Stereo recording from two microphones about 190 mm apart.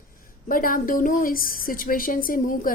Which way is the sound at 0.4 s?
50° left (ahead or behind).